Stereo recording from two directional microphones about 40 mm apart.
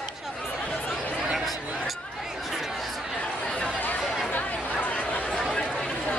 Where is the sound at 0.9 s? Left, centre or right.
Centre.